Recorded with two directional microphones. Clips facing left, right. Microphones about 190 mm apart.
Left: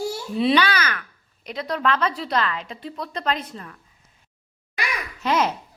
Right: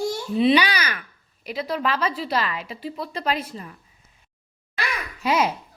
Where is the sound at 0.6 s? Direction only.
10° right (ahead or behind).